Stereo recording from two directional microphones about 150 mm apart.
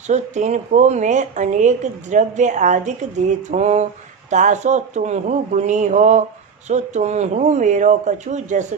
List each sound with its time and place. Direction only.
0.1 s a woman's voice: 50° right (ahead or behind)